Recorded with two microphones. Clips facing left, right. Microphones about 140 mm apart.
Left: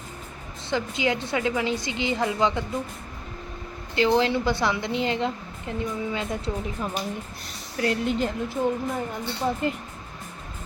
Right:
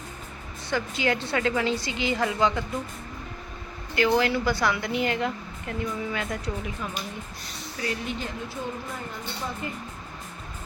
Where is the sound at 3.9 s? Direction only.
25° left (ahead or behind).